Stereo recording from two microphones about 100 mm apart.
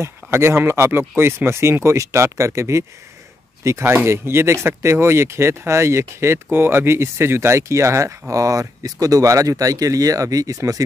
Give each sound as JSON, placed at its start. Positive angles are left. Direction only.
{"t": 0.0, "sound": "speech", "side_deg": -25}